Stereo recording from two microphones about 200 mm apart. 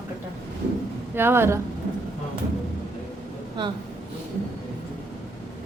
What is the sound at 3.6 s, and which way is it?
Speech, 25° right (ahead or behind).